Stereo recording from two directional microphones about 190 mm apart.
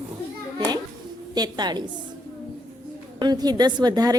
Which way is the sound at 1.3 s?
20° right (ahead or behind).